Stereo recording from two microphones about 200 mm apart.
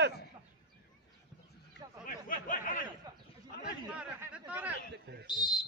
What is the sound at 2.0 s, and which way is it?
Speech, 40° left (ahead or behind).